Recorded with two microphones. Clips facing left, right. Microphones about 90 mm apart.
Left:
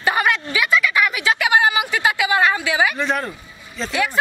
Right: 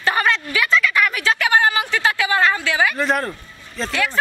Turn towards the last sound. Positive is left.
turn(degrees=15)  # may be behind; listen again after turning